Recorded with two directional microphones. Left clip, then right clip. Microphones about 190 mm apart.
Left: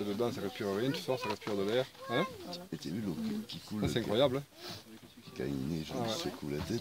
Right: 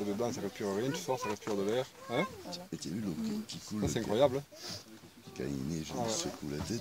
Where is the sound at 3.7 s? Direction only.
35° left (ahead or behind).